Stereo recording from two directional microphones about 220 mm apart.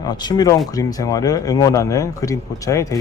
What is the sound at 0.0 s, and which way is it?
Speech, 20° left (ahead or behind).